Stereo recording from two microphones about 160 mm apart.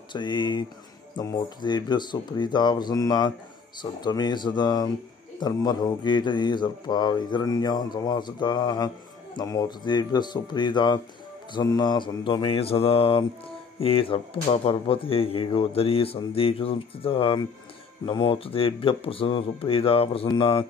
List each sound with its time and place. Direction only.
0.1 s mantra: 30° left (ahead or behind)
11.5 s speech: 25° left (ahead or behind)